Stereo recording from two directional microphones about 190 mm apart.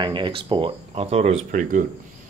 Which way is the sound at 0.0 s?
25° right (ahead or behind).